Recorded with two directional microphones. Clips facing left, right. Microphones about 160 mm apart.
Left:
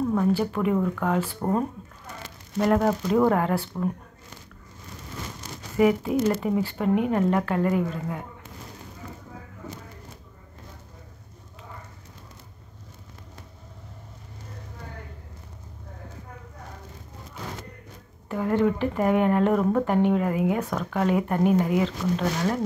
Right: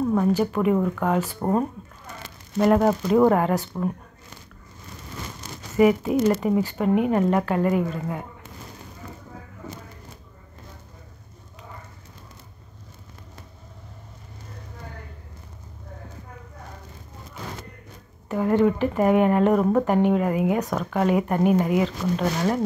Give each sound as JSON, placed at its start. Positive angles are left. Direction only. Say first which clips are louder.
{"t": 0.0, "sound": "a sound", "louder": "right 2 dB", "side_deg": -20}
{"t": 0.4, "sound": "speech", "louder": "right 3 dB", "side_deg": -15}
{"t": 5.8, "sound": "speech", "louder": "right 3 dB", "side_deg": -15}
{"t": 18.3, "sound": "speech", "louder": "right 3 dB", "side_deg": -20}